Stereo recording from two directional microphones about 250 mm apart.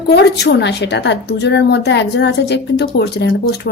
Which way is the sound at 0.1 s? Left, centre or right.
Left.